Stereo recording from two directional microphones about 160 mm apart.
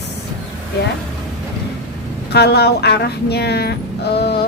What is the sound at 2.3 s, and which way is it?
Speech, 90° left.